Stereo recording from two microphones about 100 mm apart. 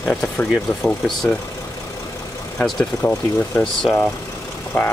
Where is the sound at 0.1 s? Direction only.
10° left (ahead or behind).